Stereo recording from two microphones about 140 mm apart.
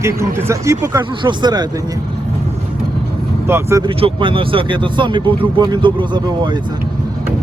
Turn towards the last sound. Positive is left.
turn(degrees=-35)  # may be behind; listen again after turning